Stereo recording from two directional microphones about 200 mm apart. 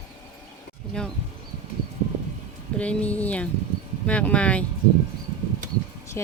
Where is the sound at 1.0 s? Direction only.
5° left (ahead or behind).